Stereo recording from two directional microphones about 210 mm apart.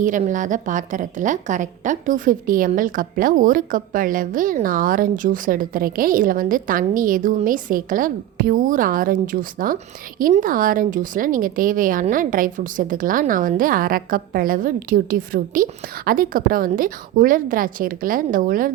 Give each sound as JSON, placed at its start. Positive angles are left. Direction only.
{"t": 0.0, "sound": "a woman's voice", "side_deg": -35}